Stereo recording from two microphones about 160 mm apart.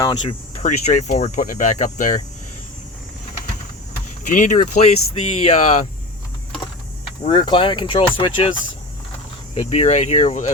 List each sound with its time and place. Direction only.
0.6 s speech: 50° left (ahead or behind)
4.3 s speech: 55° left (ahead or behind)
7.3 s speech: 30° left (ahead or behind)
9.6 s speech: 45° left (ahead or behind)